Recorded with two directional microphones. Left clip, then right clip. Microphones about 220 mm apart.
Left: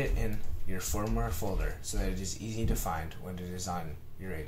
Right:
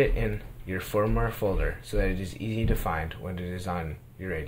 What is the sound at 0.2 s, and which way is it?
Speech, 35° right (ahead or behind).